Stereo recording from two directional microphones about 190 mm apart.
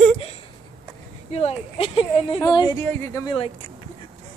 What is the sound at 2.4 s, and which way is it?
Speech, 20° left (ahead or behind).